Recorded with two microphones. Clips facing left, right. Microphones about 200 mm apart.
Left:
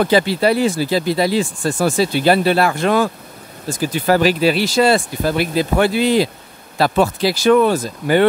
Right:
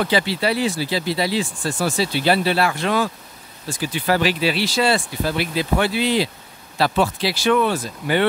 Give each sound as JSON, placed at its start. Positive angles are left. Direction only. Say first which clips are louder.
{"t": 0.0, "sound": "speech", "louder": "left 6 dB", "side_deg": 45}